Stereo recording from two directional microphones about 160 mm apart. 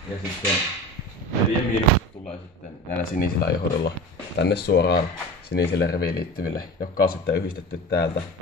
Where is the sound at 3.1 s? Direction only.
80° left.